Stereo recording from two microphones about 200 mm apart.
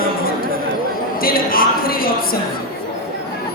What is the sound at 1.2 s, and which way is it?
Speech, 45° left (ahead or behind).